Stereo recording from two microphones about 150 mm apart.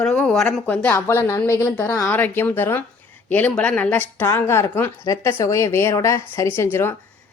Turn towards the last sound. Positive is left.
turn(degrees=15)  # may be behind; listen again after turning